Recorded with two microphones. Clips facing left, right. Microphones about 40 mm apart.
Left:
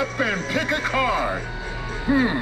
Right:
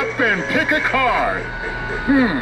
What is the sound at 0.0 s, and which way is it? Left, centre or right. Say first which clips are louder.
Speech: right 6 dB; right.